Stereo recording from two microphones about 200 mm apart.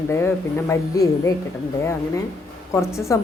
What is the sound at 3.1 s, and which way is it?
Speech, 15° left (ahead or behind).